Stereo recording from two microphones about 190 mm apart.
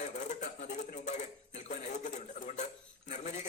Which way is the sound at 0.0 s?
40° left (ahead or behind).